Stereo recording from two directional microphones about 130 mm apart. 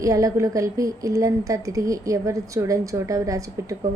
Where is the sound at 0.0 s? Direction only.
25° right (ahead or behind).